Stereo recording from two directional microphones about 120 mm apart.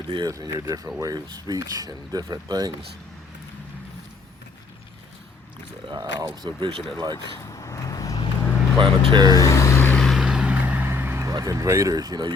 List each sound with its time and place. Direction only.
0.1 s speech: 35° right (ahead or behind)
5.9 s speech: 35° right (ahead or behind)
7.4 s vehicle: 30° left (ahead or behind)
8.4 s vehicle: 20° left (ahead or behind)
8.8 s speech: 45° right (ahead or behind)
9.2 s vehicle: 30° left (ahead or behind)
10.0 s vehicle: centre (ahead or behind); by 12.3 s 35° right (ahead or behind)